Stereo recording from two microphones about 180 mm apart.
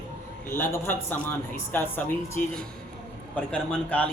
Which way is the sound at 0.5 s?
15° left (ahead or behind).